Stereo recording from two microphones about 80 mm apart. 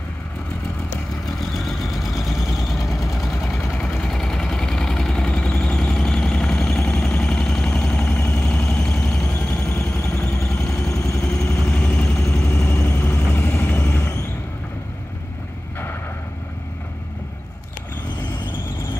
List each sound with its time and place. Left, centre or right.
1.6 s vehicle: centre
9.7 s vehicle: left
11.3 s vehicle: left
11.7 s vehicle: centre
12.3 s vehicle: left